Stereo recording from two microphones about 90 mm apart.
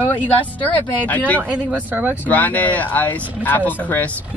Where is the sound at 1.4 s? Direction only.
15° right (ahead or behind).